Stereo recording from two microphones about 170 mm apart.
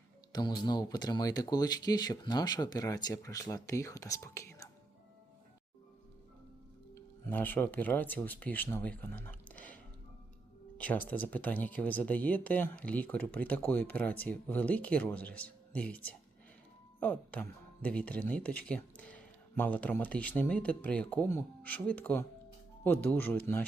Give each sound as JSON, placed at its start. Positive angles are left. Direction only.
{"t": 0.3, "sound": "speech", "side_deg": 25}
{"t": 6.9, "sound": "speech", "side_deg": 10}